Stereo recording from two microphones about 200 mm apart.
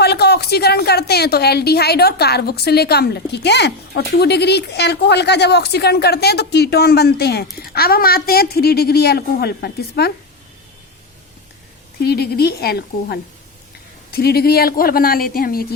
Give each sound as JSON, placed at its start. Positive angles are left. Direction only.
{"t": 0.0, "sound": "a woman's voice", "side_deg": 55}
{"t": 11.9, "sound": "a woman's voice", "side_deg": 55}